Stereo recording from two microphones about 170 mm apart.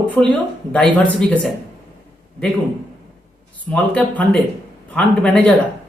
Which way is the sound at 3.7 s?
5° left (ahead or behind).